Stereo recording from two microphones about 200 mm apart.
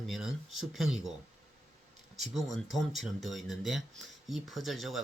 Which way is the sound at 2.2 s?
Centre (ahead or behind).